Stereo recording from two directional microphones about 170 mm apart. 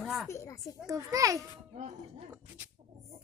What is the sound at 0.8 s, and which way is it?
Speech, 20° right (ahead or behind).